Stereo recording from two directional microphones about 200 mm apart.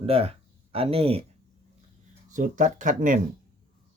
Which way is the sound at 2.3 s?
40° right (ahead or behind).